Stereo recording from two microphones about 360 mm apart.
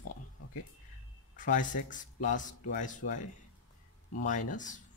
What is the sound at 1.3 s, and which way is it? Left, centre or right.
Speech, left.